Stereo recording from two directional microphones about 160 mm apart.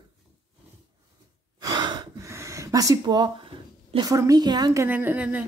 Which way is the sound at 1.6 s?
25° right (ahead or behind).